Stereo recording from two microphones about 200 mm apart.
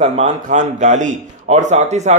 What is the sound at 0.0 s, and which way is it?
A man's voice, 35° right (ahead or behind).